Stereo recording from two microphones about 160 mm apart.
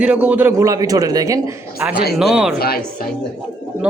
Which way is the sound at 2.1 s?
Centre (ahead or behind).